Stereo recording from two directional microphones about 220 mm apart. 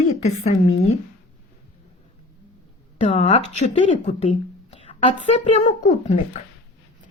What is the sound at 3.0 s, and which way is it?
Speech, 30° left (ahead or behind).